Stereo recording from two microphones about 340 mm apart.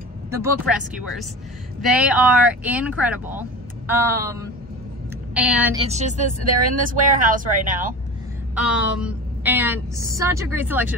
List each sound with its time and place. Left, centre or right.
0.3 s speech: centre
5.8 s speech: centre
8.5 s speech: centre